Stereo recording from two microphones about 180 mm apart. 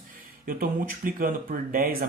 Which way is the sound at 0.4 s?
50° right (ahead or behind).